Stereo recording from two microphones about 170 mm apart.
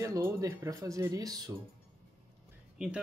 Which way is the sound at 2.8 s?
5° right (ahead or behind).